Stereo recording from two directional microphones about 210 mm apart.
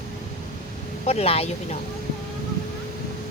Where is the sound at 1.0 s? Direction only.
30° left (ahead or behind).